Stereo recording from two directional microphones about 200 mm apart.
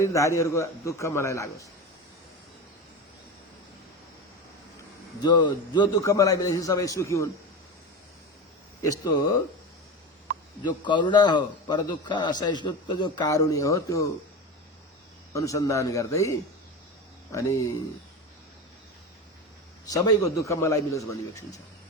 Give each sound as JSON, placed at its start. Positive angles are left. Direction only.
{"t": 0.0, "sound": "a man's voice", "side_deg": 15}
{"t": 5.2, "sound": "a man's voice", "side_deg": 20}
{"t": 8.8, "sound": "a man's voice", "side_deg": 15}
{"t": 10.6, "sound": "a man's voice", "side_deg": 20}
{"t": 15.3, "sound": "a man's voice", "side_deg": 15}
{"t": 17.3, "sound": "a man's voice", "side_deg": 15}
{"t": 19.9, "sound": "a man's voice", "side_deg": 15}